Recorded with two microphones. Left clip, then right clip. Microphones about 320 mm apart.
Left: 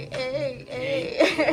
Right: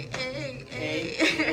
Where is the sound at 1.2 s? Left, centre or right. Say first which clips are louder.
Left 4 dB; centre.